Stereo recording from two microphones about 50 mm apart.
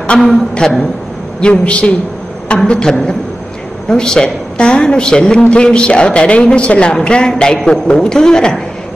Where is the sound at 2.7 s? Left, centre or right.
Centre.